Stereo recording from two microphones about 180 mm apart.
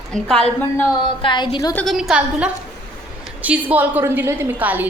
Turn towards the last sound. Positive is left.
turn(degrees=-10)  # may be behind; listen again after turning